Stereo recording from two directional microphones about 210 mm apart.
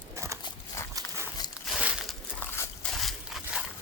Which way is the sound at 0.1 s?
15° right (ahead or behind).